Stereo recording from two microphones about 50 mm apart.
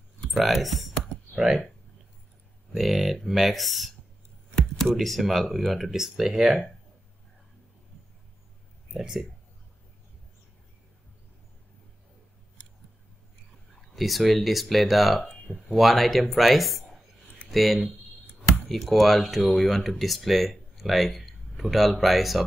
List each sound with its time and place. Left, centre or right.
0.3 s speech: centre
1.3 s speech: centre
2.7 s speech: centre
8.9 s speech: centre
13.7 s speech: centre